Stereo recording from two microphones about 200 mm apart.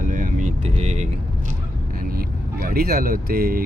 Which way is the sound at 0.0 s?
40° right (ahead or behind).